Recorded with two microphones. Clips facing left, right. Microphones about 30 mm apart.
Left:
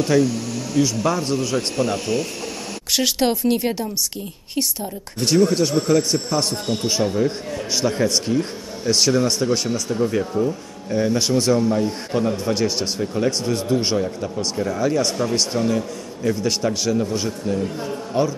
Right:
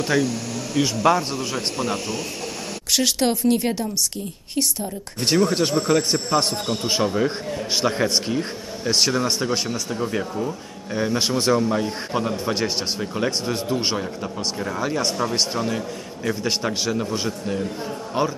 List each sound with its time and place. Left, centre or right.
0.0 s speech: centre
0.8 s speech: right
1.2 s speech: centre
2.9 s a woman's voice: centre
5.5 s a man's voice: right
8.9 s a man's voice: centre